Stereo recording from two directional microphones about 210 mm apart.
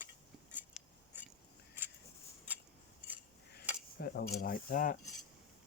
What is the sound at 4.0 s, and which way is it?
Speech, 45° left (ahead or behind).